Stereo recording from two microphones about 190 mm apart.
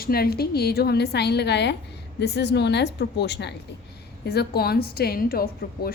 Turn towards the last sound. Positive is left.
turn(degrees=50)  # may be behind; listen again after turning